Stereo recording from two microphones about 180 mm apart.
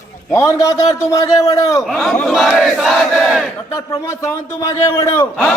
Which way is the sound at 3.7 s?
15° left (ahead or behind).